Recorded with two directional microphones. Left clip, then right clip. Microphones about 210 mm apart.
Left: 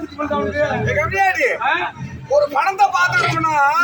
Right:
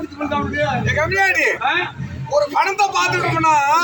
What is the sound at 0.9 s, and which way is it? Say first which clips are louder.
A man's voice: right 2 dB; 5° left (ahead or behind).